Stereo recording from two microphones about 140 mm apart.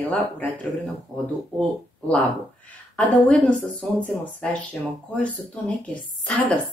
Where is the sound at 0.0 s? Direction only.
10° left (ahead or behind).